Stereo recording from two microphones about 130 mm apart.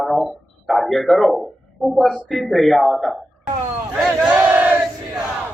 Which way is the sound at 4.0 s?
5° right (ahead or behind).